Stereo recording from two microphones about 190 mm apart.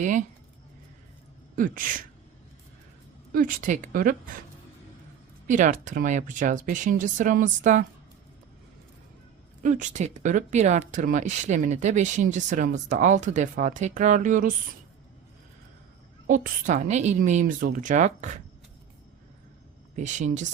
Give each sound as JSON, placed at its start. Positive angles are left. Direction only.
{"t": 0.0, "sound": "speech", "side_deg": -40}
{"t": 1.5, "sound": "speech", "side_deg": -45}
{"t": 3.3, "sound": "speech", "side_deg": -45}
{"t": 5.5, "sound": "speech", "side_deg": -40}
{"t": 9.6, "sound": "speech", "side_deg": -40}
{"t": 16.2, "sound": "speech", "side_deg": -40}
{"t": 20.0, "sound": "speech", "side_deg": -40}